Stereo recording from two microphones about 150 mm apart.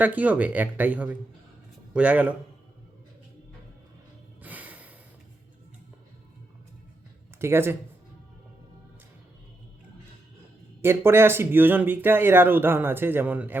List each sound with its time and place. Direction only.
0.0 s a man's voice: 10° right (ahead or behind)
4.4 s snort: 10° right (ahead or behind)
7.3 s speech: 15° right (ahead or behind)
10.8 s speech: 15° right (ahead or behind)